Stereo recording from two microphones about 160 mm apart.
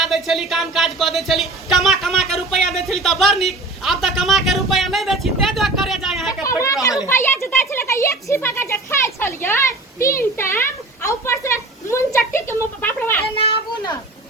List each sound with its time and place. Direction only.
0.0 s speech: centre (ahead or behind)
6.4 s chatter: 20° left (ahead or behind)
7.1 s a sound: 15° left (ahead or behind)
13.3 s children playing: 35° left (ahead or behind)